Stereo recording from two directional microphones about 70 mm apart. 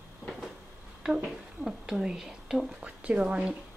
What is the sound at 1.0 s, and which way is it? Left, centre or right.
Speech, centre.